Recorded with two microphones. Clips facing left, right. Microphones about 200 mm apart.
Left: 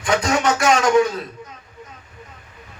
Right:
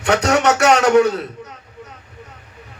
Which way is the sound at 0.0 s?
70° right (ahead or behind).